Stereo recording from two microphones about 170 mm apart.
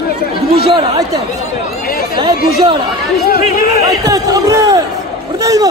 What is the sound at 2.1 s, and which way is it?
Speech, 25° right (ahead or behind).